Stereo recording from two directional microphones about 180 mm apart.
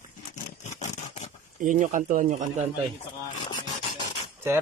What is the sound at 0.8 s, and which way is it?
Scrape, 40° left (ahead or behind).